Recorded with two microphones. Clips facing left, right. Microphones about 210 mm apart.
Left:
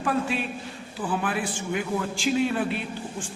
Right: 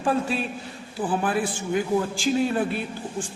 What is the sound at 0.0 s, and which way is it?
A man's voice, 35° right (ahead or behind).